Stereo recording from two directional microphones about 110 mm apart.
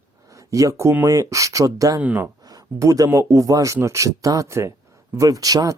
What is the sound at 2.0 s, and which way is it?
Speech, 15° right (ahead or behind).